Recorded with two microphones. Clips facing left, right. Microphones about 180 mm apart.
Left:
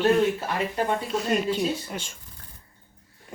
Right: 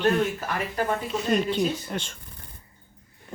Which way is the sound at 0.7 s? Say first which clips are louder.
Right 1 dB; 25° left (ahead or behind).